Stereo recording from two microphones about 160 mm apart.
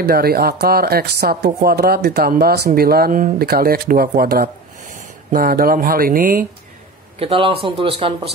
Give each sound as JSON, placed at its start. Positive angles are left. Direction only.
{"t": 0.0, "sound": "speech", "side_deg": -75}
{"t": 7.2, "sound": "speech", "side_deg": -35}